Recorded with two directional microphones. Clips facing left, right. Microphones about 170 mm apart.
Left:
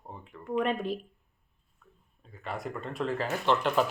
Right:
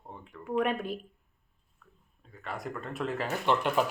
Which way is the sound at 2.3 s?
Centre (ahead or behind).